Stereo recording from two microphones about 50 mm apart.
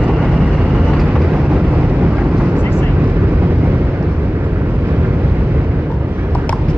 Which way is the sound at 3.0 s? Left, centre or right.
Right.